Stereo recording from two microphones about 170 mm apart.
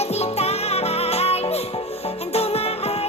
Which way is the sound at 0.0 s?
40° left (ahead or behind).